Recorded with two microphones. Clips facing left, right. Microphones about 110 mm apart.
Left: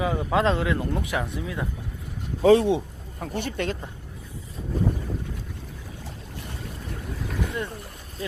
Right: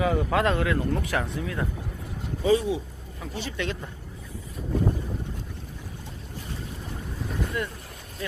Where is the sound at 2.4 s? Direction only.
70° left (ahead or behind).